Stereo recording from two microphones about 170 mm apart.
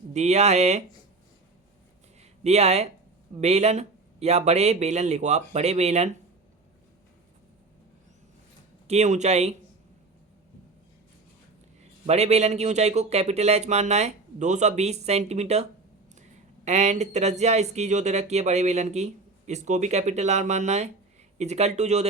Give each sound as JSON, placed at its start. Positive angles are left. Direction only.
{"t": 0.1, "sound": "speech", "side_deg": -40}
{"t": 2.4, "sound": "speech", "side_deg": -40}
{"t": 8.9, "sound": "speech", "side_deg": -40}
{"t": 12.0, "sound": "speech", "side_deg": -40}
{"t": 16.6, "sound": "speech", "side_deg": -45}